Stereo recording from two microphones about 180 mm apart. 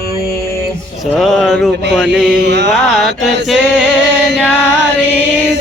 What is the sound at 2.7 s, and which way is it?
Mantra, centre (ahead or behind).